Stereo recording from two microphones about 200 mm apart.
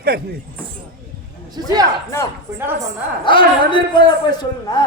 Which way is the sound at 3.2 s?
25° left (ahead or behind).